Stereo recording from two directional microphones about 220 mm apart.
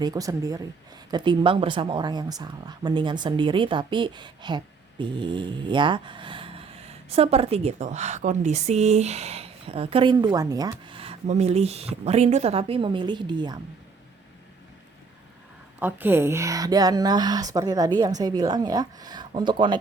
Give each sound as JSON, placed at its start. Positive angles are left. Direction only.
{"t": 0.0, "sound": "speech", "side_deg": -15}
{"t": 15.8, "sound": "speech", "side_deg": -10}